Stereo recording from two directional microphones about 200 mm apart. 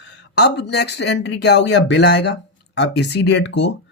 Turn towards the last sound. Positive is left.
turn(degrees=60)  # may be behind; listen again after turning